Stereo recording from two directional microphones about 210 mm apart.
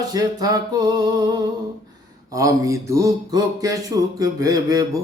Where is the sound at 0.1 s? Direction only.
20° right (ahead or behind).